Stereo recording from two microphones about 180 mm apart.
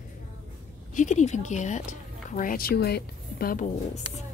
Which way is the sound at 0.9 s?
45° left (ahead or behind).